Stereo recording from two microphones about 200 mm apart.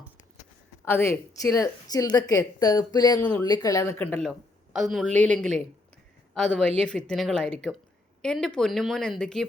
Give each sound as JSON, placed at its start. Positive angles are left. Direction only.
{"t": 0.9, "sound": "a woman's voice", "side_deg": 10}
{"t": 3.2, "sound": "a woman's voice", "side_deg": 10}
{"t": 4.3, "sound": "speech", "side_deg": 0}